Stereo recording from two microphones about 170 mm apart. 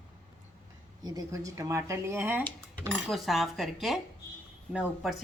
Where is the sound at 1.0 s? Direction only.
20° right (ahead or behind).